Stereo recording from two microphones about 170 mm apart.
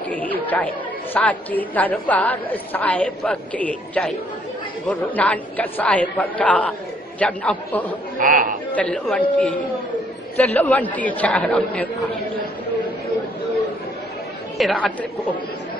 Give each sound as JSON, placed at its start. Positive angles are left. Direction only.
{"t": 0.1, "sound": "a woman's voice", "side_deg": 10}
{"t": 8.2, "sound": "a man's voice", "side_deg": -55}
{"t": 8.7, "sound": "a woman's voice", "side_deg": 5}
{"t": 10.3, "sound": "a woman's voice", "side_deg": 10}
{"t": 14.6, "sound": "a woman's voice", "side_deg": 5}